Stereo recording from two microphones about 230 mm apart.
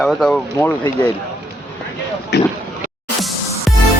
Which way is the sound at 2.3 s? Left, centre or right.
Left.